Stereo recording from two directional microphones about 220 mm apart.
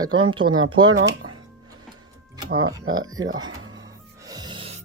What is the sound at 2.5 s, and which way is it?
Speech, 70° right (ahead or behind).